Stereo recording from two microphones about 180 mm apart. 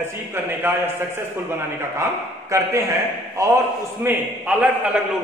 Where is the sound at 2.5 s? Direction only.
15° right (ahead or behind).